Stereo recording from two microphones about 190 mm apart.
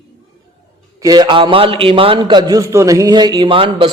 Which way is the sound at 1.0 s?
20° right (ahead or behind).